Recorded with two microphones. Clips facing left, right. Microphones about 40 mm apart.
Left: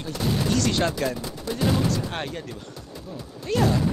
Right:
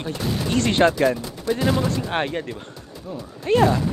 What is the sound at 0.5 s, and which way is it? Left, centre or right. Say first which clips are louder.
Speech: right 8 dB; right.